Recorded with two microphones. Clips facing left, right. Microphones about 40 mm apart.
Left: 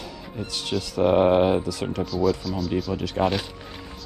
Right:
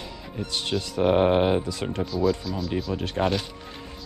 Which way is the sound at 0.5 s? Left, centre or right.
Right.